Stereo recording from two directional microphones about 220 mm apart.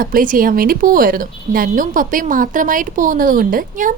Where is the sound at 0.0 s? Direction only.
40° right (ahead or behind).